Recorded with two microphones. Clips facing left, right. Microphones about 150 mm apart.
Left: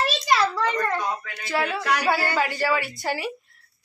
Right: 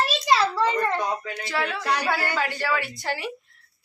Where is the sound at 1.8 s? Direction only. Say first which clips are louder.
Left 1 dB; 25° right (ahead or behind).